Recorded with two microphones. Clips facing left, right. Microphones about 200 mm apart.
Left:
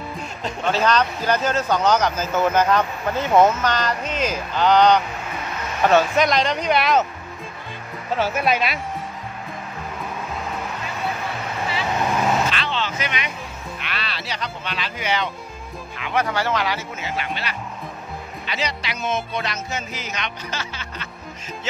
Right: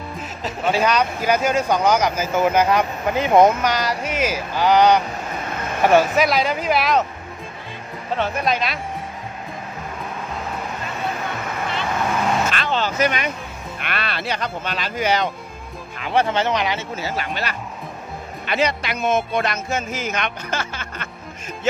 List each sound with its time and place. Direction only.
0.4 s speech: 5° right (ahead or behind)
8.1 s speech: 5° left (ahead or behind)
12.4 s a sound: 45° right (ahead or behind)
13.7 s music: 55° right (ahead or behind)
16.0 s speech: 30° right (ahead or behind)
16.9 s speech: 40° right (ahead or behind)
18.5 s music: 55° right (ahead or behind)